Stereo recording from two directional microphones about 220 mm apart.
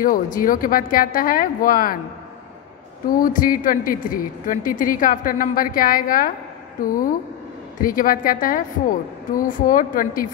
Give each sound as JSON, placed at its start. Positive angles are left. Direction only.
{"t": 0.0, "sound": "a woman's voice", "side_deg": 40}
{"t": 3.1, "sound": "a woman's voice", "side_deg": 40}